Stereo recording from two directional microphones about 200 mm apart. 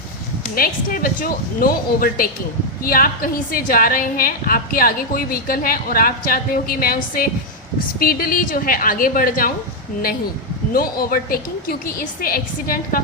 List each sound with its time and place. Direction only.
0.5 s a woman's voice: 45° left (ahead or behind)
10.7 s a woman's voice: 45° left (ahead or behind)